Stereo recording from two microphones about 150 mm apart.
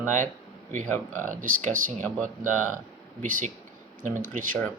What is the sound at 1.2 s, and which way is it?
Speech, 60° right (ahead or behind).